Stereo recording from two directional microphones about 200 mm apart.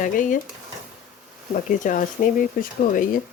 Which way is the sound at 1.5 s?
40° left (ahead or behind).